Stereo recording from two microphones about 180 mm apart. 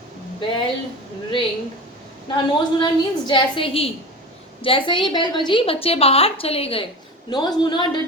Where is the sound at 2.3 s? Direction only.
25° left (ahead or behind).